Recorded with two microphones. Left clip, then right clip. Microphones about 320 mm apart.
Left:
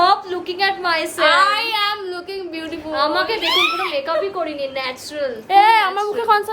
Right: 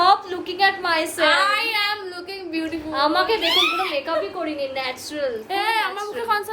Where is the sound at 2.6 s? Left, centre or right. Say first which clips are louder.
Left 1 dB; centre.